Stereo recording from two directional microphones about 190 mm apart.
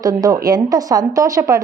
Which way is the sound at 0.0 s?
20° right (ahead or behind).